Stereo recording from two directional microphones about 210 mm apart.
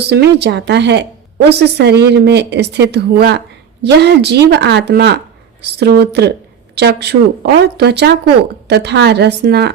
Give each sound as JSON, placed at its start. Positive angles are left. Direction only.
{"t": 0.0, "sound": "speech", "side_deg": -50}